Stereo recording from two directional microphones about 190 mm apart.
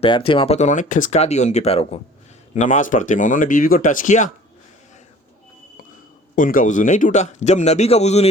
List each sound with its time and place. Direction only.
0.0 s speech: 30° left (ahead or behind)
6.3 s speech: 45° left (ahead or behind)